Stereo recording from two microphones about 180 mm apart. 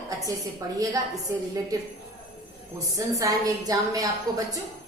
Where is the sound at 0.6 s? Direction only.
20° right (ahead or behind).